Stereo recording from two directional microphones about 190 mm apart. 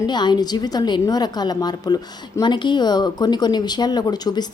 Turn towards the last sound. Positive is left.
turn(degrees=20)  # may be behind; listen again after turning